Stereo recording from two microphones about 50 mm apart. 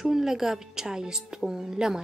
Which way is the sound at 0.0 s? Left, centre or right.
Centre.